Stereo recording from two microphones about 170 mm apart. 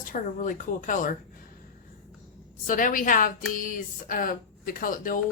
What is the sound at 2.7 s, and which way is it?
Speech, 50° left (ahead or behind).